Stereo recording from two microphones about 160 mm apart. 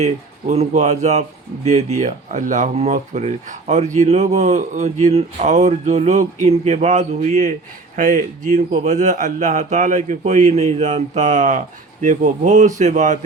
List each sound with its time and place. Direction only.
0.0 s speech: 45° right (ahead or behind)